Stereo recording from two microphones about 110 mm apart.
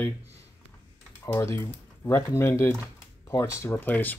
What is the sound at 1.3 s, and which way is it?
Speech, 20° left (ahead or behind).